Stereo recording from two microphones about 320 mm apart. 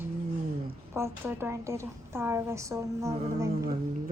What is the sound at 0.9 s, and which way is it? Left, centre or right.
A woman's voice, centre.